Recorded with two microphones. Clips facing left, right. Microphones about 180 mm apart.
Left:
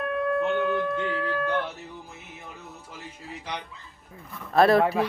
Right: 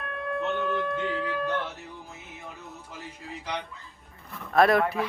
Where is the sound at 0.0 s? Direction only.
Centre (ahead or behind).